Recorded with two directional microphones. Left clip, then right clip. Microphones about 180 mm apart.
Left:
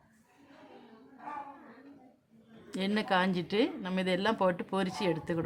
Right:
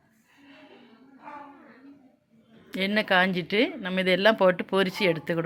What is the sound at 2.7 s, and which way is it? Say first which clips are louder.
A woman's voice: right 7 dB; 15° right (ahead or behind).